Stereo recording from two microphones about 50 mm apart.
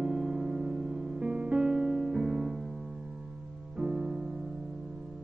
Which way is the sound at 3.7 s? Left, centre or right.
Centre.